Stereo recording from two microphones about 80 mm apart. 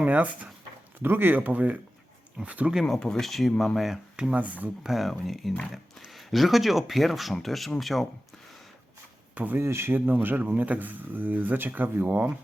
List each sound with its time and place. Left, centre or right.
0.0 s speech: centre
2.9 s speech: centre
4.3 s speech: centre
4.8 s speech: centre
9.3 s speech: centre
9.6 s speech: right